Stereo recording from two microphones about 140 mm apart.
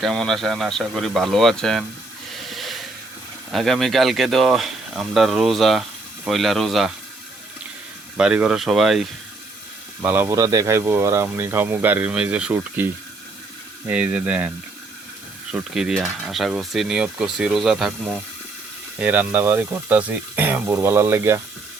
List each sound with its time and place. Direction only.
0.0 s speech: 5° left (ahead or behind)
2.3 s a sound: centre (ahead or behind)
3.5 s speech: centre (ahead or behind)
8.1 s speech: 10° right (ahead or behind)
10.0 s speech: 15° right (ahead or behind)
15.5 s speech: 5° right (ahead or behind)